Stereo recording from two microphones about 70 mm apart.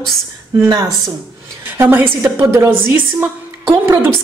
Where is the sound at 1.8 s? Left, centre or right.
Right.